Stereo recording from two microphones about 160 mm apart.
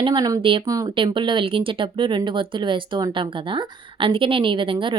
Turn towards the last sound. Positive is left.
turn(degrees=-30)  # may be behind; listen again after turning